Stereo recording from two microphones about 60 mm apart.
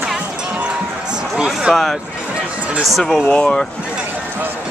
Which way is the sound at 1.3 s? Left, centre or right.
Centre.